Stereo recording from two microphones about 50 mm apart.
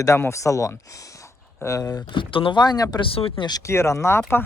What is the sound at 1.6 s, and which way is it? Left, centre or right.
Speech, left.